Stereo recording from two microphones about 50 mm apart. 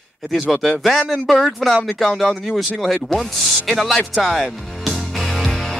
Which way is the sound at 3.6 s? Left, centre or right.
Centre.